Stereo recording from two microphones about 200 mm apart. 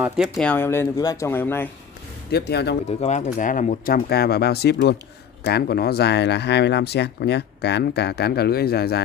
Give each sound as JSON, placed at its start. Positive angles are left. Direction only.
{"t": 0.0, "sound": "speech", "side_deg": -5}
{"t": 0.5, "sound": "speech", "side_deg": 10}
{"t": 2.3, "sound": "speech", "side_deg": 55}
{"t": 3.0, "sound": "speech", "side_deg": 35}